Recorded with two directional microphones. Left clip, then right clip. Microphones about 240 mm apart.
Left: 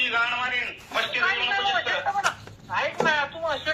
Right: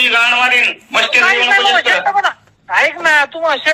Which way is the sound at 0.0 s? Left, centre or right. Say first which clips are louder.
Right 13 dB; right.